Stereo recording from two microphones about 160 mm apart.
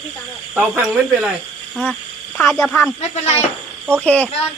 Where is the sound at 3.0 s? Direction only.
45° left (ahead or behind).